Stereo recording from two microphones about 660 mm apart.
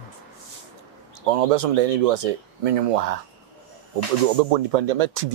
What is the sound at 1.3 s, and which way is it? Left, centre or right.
Speech, right.